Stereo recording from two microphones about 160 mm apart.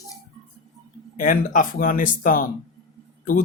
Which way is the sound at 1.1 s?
55° left (ahead or behind).